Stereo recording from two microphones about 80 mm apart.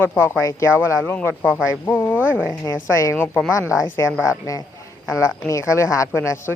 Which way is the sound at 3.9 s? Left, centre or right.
Left.